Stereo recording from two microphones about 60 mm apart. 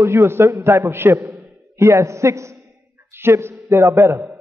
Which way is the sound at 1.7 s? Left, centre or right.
Right.